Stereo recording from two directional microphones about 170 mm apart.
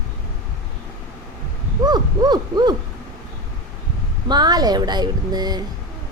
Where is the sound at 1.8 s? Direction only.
25° right (ahead or behind).